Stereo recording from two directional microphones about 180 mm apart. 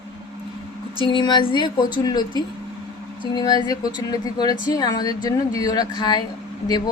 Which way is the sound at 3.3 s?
20° left (ahead or behind).